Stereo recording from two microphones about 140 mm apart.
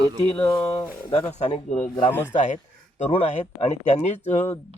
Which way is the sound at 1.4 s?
55° left (ahead or behind).